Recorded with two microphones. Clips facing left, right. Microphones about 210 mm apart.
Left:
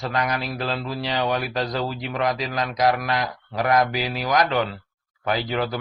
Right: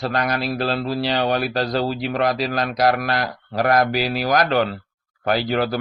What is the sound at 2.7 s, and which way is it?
Speech, 65° right (ahead or behind).